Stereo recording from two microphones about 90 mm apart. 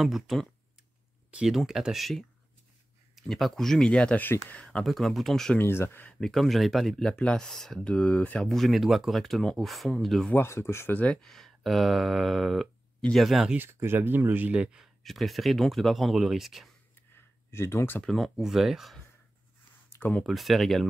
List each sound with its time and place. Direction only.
0.0 s speech: centre (ahead or behind)
4.8 s speech: centre (ahead or behind)
5.6 s speech: 25° left (ahead or behind)
6.1 s speech: centre (ahead or behind)
8.5 s speech: centre (ahead or behind)
10.3 s speech: 30° left (ahead or behind); by 13.6 s 5° right (ahead or behind)
13.6 s speech: 25° right (ahead or behind)
15.0 s speech: centre (ahead or behind)
17.1 s a sound: 25° left (ahead or behind)
18.0 s speech: centre (ahead or behind)
20.0 s speech: 15° left (ahead or behind)
20.2 s speech: centre (ahead or behind)